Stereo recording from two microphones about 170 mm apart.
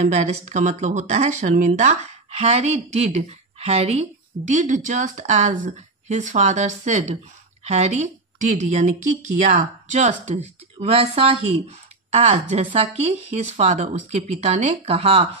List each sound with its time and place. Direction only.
0.1 s a woman's voice: 45° right (ahead or behind)